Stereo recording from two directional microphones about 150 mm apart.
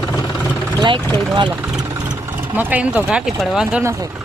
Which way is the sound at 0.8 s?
30° right (ahead or behind).